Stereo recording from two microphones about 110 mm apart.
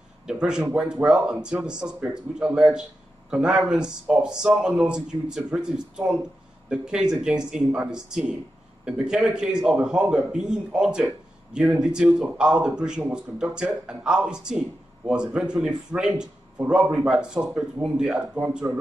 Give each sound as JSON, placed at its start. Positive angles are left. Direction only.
{"t": 0.3, "sound": "speech", "side_deg": -5}
{"t": 18.7, "sound": "speech", "side_deg": -20}